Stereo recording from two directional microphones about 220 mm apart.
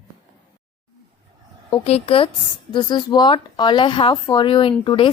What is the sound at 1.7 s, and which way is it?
A woman's voice, 25° left (ahead or behind).